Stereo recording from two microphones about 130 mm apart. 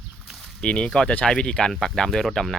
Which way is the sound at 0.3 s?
10° left (ahead or behind).